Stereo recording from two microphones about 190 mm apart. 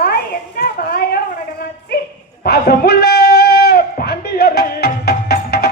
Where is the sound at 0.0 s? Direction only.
55° left (ahead or behind).